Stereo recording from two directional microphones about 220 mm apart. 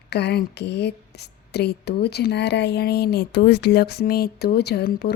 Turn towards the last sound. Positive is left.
turn(degrees=45)  # may be behind; listen again after turning